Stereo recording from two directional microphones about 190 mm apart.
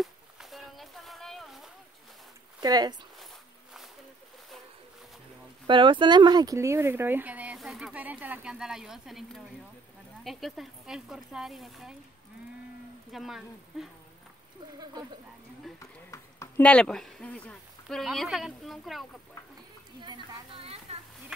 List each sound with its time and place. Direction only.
0.0 s a sound: centre (ahead or behind)
2.6 s speech: 20° right (ahead or behind)
5.7 s speech: 25° right (ahead or behind); by 11.9 s centre (ahead or behind)
13.1 s speech: centre (ahead or behind)
15.8 s speech: 15° left (ahead or behind); by 19.0 s centre (ahead or behind)
20.0 s a sound: 25° right (ahead or behind)